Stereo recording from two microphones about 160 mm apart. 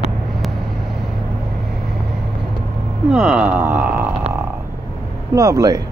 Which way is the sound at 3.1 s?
5° right (ahead or behind).